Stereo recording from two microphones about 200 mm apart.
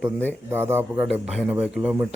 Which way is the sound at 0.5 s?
10° right (ahead or behind).